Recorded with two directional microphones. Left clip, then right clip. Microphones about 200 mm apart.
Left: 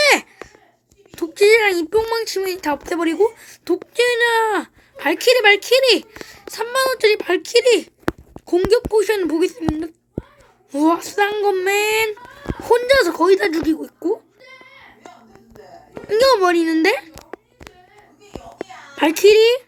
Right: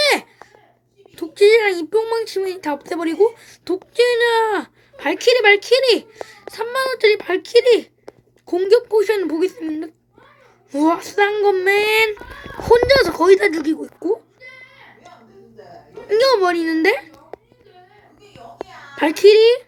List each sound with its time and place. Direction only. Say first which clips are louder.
0.0 s a sound: left 2 dB; centre (ahead or behind)
1.1 s speech: right 1 dB; centre (ahead or behind)
16.0 s speech: left 1 dB; centre (ahead or behind)
18.9 s speech: right 1 dB; 5° left (ahead or behind)